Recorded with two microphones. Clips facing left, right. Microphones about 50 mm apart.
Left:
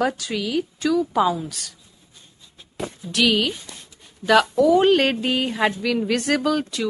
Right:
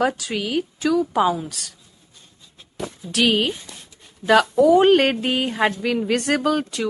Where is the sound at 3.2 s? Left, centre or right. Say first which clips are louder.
Right 1 dB; right.